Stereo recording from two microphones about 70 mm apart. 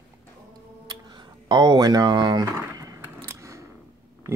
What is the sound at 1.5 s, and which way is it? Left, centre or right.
Speech, right.